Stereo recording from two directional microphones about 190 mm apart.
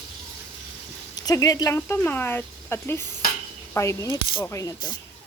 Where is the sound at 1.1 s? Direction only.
20° left (ahead or behind).